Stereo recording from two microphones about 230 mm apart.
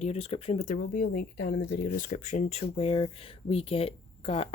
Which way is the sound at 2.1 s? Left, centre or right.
Left.